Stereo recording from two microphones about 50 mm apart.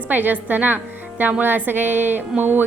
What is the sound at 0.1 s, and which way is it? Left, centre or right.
A woman's voice, right.